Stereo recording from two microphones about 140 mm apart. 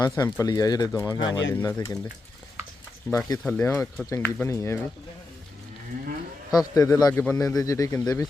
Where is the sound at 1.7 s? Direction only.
20° left (ahead or behind).